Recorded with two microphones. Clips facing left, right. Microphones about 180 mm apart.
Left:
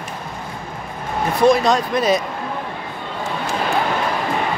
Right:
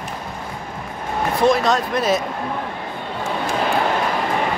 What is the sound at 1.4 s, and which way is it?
Speech, 5° right (ahead or behind).